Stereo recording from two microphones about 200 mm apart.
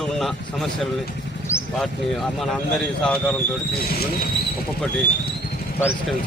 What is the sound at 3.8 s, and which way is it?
Speech, 50° left (ahead or behind).